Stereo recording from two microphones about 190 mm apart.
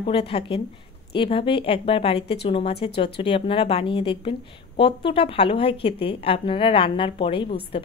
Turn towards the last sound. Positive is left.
turn(degrees=30)  # may be behind; listen again after turning